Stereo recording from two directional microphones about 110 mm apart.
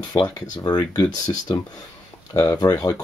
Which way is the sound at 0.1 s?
40° left (ahead or behind).